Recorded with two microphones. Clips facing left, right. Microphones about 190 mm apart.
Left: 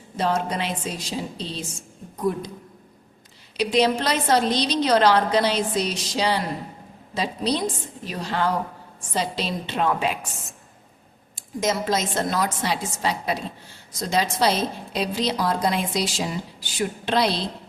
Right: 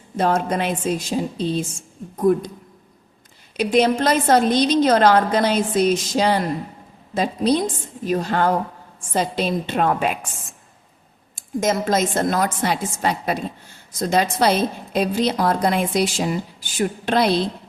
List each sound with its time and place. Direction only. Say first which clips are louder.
0.2 s a woman's voice: right 4 dB; 50° right (ahead or behind)
3.6 s a woman's voice: right 3 dB; 50° right (ahead or behind)
11.3 s a woman's voice: right 4 dB; 50° right (ahead or behind)